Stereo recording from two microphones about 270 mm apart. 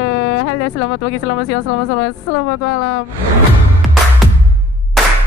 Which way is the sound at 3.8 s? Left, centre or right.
Centre.